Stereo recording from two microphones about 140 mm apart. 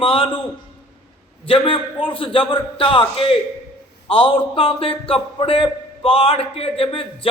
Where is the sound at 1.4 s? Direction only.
40° left (ahead or behind).